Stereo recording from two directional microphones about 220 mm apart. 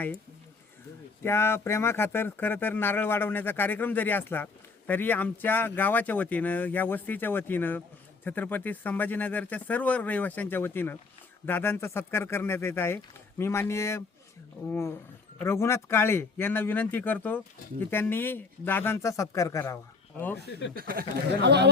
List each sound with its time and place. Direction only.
1.2 s speech: 10° left (ahead or behind)
20.7 s speech: 45° right (ahead or behind)